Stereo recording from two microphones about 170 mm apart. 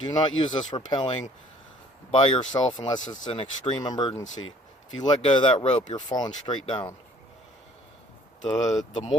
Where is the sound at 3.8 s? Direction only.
25° left (ahead or behind).